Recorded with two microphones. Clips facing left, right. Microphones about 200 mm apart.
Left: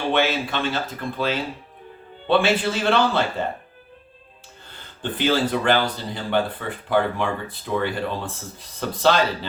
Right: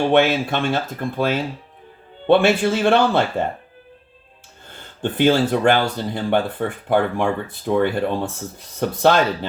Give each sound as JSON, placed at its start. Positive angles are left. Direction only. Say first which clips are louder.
{"t": 0.1, "sound": "speech", "louder": "right 5 dB", "side_deg": -50}
{"t": 5.1, "sound": "speech", "louder": "right 5 dB", "side_deg": -50}